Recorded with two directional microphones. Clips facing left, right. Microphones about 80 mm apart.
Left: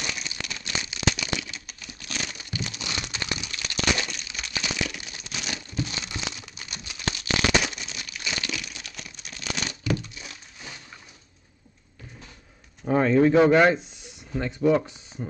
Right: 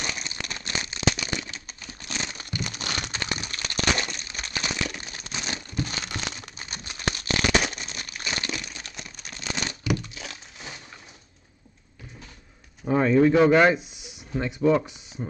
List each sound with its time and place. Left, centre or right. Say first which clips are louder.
0.0 s crumpling: right 1 dB; right
2.0 s a sound: right 1 dB; right
2.3 s a sound: right 1 dB; right
5.3 s crumpling: right 1 dB; right
5.8 s a sound: right 1 dB; right
6.6 s crumpling: right 2 dB; right
12.8 s pigeon: even; centre
13.5 s speech: even; centre
15.2 s speech: right 1 dB; centre